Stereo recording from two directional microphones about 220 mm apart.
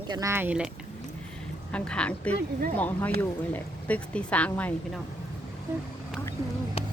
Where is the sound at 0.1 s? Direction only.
15° right (ahead or behind).